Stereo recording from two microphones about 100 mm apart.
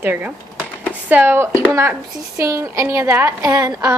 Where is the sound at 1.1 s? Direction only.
20° right (ahead or behind).